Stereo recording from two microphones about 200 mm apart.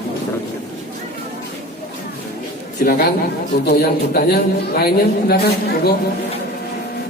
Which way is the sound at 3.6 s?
50° left (ahead or behind).